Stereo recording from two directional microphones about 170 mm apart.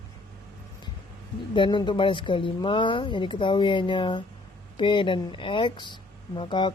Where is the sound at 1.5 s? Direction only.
30° left (ahead or behind).